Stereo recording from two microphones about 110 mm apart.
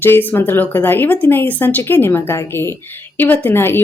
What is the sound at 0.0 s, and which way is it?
Speech, 20° left (ahead or behind).